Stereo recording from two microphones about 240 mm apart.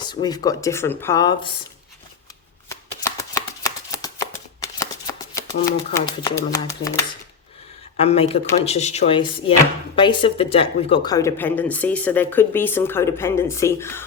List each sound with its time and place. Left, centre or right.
0.0 s speech: centre
3.3 s shuffling cards: centre
5.9 s speech: centre
7.9 s speech: left